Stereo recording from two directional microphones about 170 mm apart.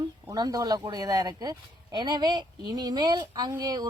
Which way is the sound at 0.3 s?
20° right (ahead or behind).